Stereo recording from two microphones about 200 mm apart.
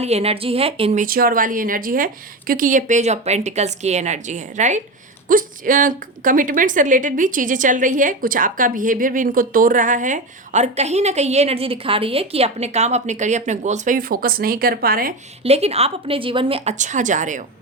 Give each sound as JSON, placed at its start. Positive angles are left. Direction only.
{"t": 0.0, "sound": "a woman's voice", "side_deg": -30}
{"t": 1.0, "sound": "a woman's voice", "side_deg": -45}
{"t": 15.4, "sound": "a woman's voice", "side_deg": -30}